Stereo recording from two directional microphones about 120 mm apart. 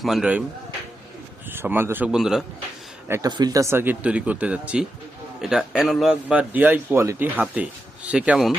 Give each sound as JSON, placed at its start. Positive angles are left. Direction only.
{"t": 0.0, "sound": "speech", "side_deg": -5}
{"t": 1.5, "sound": "a man's voice", "side_deg": -15}
{"t": 2.0, "sound": "a man's voice", "side_deg": -5}
{"t": 3.1, "sound": "a man's voice", "side_deg": -30}
{"t": 6.2, "sound": "speech", "side_deg": -15}
{"t": 7.4, "sound": "speech", "side_deg": -10}